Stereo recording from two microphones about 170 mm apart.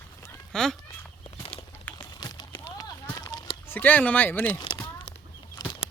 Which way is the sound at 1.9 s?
25° left (ahead or behind).